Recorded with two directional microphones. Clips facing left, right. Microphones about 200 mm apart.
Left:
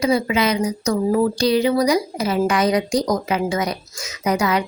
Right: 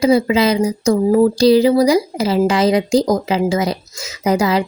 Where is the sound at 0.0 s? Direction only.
30° right (ahead or behind).